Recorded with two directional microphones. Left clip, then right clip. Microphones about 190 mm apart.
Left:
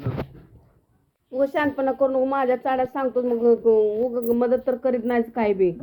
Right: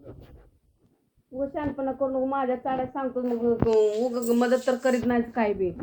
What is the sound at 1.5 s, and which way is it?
A woman's voice, 20° left (ahead or behind).